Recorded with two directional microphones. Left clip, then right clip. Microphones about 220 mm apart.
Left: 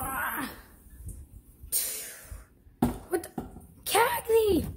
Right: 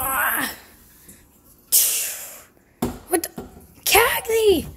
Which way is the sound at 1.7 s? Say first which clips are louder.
Right 14 dB; 25° right (ahead or behind).